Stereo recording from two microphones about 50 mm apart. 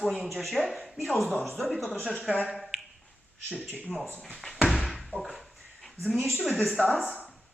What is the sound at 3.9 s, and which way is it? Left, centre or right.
Speech, centre.